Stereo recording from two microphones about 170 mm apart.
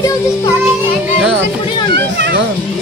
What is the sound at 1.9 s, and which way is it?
Speech, 85° right.